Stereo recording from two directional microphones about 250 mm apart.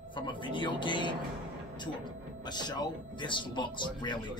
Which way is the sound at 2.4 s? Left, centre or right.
Centre.